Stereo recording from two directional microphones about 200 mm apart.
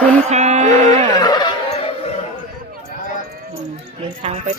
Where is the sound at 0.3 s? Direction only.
35° right (ahead or behind).